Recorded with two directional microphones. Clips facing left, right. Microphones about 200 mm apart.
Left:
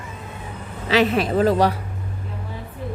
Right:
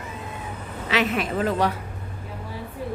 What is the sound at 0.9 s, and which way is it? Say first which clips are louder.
Speech: left 6 dB; 35° left (ahead or behind).